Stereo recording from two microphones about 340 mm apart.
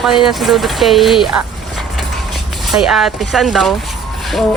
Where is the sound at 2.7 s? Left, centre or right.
Centre.